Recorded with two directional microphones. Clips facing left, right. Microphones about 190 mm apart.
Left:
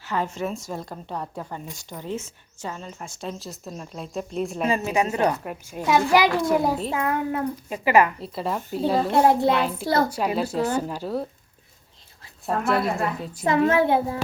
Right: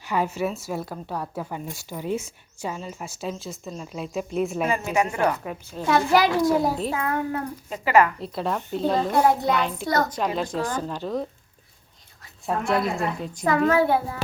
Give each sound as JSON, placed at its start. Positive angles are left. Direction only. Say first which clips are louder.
{"t": 0.0, "sound": "a woman's voice", "louder": "right 2 dB", "side_deg": -10}
{"t": 4.9, "sound": "a child's voice", "louder": "even", "side_deg": 20}
{"t": 5.4, "sound": "a child's voice", "louder": "even", "side_deg": 10}
{"t": 8.2, "sound": "speech", "louder": "right 1 dB", "side_deg": 0}
{"t": 9.0, "sound": "a child's voice", "louder": "left 4 dB", "side_deg": 25}
{"t": 9.6, "sound": "speech", "louder": "left 1 dB", "side_deg": 5}
{"t": 9.8, "sound": "a child's voice", "louder": "left 2 dB", "side_deg": 30}
{"t": 10.1, "sound": "a child's voice", "louder": "left 1 dB", "side_deg": 10}
{"t": 12.5, "sound": "speech", "louder": "left 1 dB", "side_deg": 0}
{"t": 13.4, "sound": "a child's voice", "louder": "left 1 dB", "side_deg": 25}